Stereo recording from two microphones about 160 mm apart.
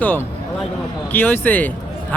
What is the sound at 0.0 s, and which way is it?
Speech, 10° left (ahead or behind).